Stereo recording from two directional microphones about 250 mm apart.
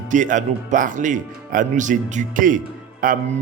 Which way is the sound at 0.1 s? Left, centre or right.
Right.